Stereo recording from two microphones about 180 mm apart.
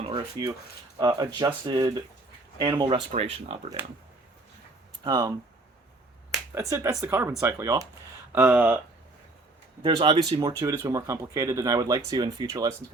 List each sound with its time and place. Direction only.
0.0 s a sound: 20° right (ahead or behind)
0.9 s speech: 25° right (ahead or behind)
5.0 s speech: 20° right (ahead or behind)
6.5 s speech: 15° right (ahead or behind)
9.8 s speech: 25° right (ahead or behind)